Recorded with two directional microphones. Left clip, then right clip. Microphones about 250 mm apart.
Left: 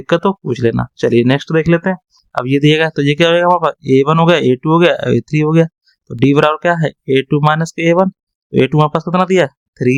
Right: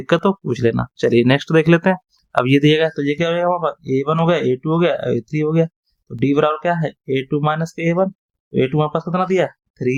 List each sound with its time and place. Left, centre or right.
0.0 s speech: centre; by 9.9 s left